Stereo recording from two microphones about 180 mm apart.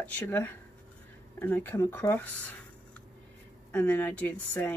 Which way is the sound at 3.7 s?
10° left (ahead or behind).